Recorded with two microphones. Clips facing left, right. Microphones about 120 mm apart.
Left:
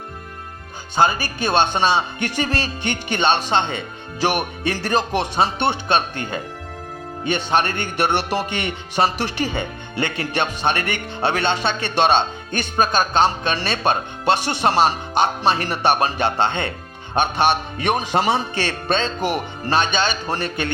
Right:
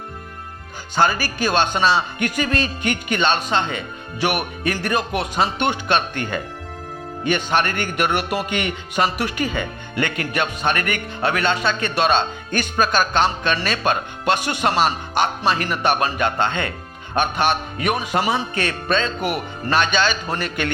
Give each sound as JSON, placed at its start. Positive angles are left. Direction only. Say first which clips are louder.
{"t": 0.9, "sound": "speech", "louder": "even", "side_deg": 20}